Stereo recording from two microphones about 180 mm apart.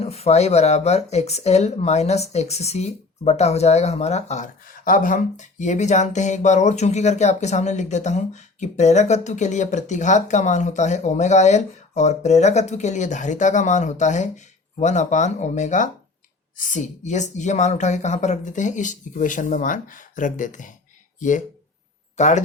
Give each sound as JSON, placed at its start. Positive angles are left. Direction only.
{"t": 0.0, "sound": "speech", "side_deg": 35}